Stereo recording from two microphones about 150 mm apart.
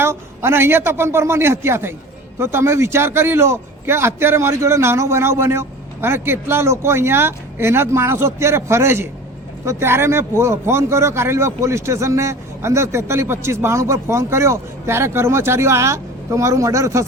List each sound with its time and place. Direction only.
0.0 s speech: 15° right (ahead or behind)